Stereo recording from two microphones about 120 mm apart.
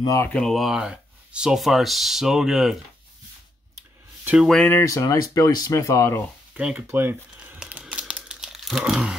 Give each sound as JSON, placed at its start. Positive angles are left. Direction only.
{"t": 0.0, "sound": "speech", "side_deg": 25}
{"t": 0.3, "sound": "speech", "side_deg": 5}
{"t": 4.2, "sound": "a sound", "side_deg": -10}
{"t": 4.6, "sound": "speech", "side_deg": 25}
{"t": 6.5, "sound": "speech", "side_deg": -10}
{"t": 7.6, "sound": "crumpling", "side_deg": -10}